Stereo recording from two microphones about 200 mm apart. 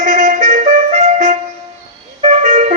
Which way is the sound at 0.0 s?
40° right (ahead or behind).